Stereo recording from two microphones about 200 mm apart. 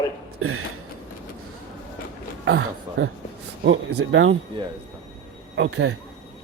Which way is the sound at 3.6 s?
55° right (ahead or behind).